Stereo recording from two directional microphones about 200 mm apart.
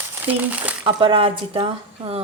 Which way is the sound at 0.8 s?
25° right (ahead or behind).